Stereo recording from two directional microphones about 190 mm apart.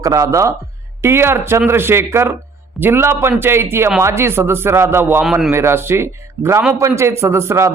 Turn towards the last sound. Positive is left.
turn(degrees=-15)  # may be behind; listen again after turning